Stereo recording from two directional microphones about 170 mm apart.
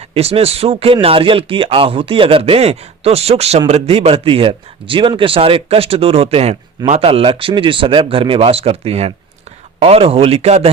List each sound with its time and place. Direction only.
0.1 s a man's voice: 35° right (ahead or behind)